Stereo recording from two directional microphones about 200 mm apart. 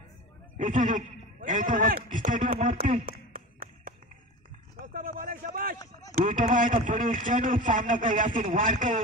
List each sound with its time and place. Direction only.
0.6 s a man's voice: 40° right (ahead or behind)
4.7 s a sound: 45° right (ahead or behind)
6.1 s speech: 40° right (ahead or behind)